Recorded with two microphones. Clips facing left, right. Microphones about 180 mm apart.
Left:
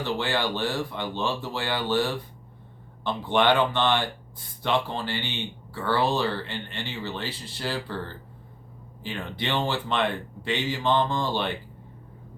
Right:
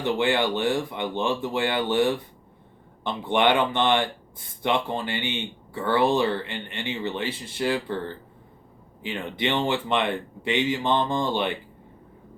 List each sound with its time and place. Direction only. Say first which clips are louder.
0.0 s speech: right 4 dB; 20° right (ahead or behind)